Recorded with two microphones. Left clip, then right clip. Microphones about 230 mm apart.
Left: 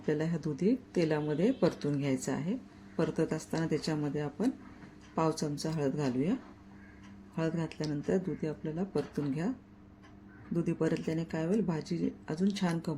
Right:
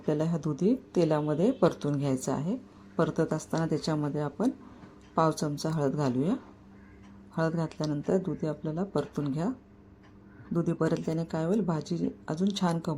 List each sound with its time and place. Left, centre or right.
0.0 s speech: centre
7.3 s speech: centre
10.5 s speech: centre